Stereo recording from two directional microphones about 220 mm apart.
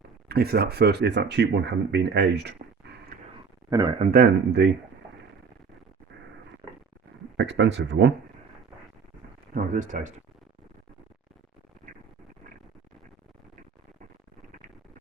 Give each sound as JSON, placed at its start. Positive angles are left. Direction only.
{"t": 0.3, "sound": "speech", "side_deg": -45}
{"t": 3.7, "sound": "speech", "side_deg": -20}
{"t": 4.0, "sound": "speech", "side_deg": -40}
{"t": 7.3, "sound": "speech", "side_deg": -55}
{"t": 9.6, "sound": "speech", "side_deg": -35}